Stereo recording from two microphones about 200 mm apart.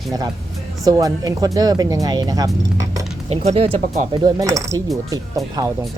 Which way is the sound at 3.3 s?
30° right (ahead or behind).